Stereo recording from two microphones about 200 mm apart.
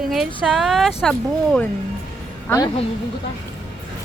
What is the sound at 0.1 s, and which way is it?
Speech, 5° left (ahead or behind).